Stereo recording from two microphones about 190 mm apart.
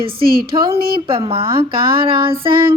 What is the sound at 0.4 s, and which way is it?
Speech, 25° right (ahead or behind).